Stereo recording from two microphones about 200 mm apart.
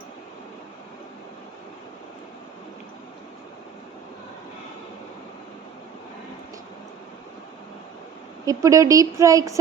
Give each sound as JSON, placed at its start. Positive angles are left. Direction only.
{"t": 8.4, "sound": "speech", "side_deg": -15}